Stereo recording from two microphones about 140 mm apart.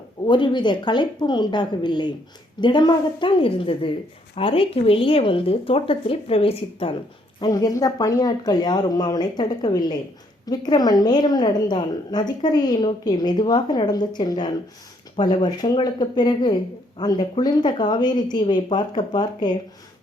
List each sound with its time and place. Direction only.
0.3 s a woman's voice: 35° left (ahead or behind)
7.3 s a woman's voice: 25° left (ahead or behind)